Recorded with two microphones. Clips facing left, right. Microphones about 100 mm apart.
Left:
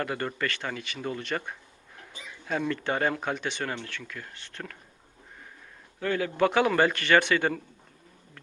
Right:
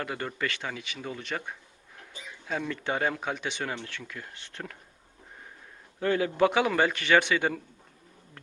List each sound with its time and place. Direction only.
0.0 s speech: 5° right (ahead or behind)
3.8 s speech: 20° right (ahead or behind)
6.0 s a man's voice: 25° right (ahead or behind); by 7.6 s 10° right (ahead or behind)